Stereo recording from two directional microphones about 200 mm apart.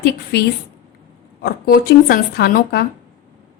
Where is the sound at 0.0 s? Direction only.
55° left (ahead or behind).